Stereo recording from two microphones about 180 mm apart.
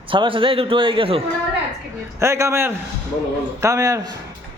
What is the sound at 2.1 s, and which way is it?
A man's voice, 15° right (ahead or behind).